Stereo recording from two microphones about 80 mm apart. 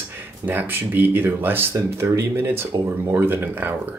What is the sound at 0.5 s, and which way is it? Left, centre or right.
Speech, right.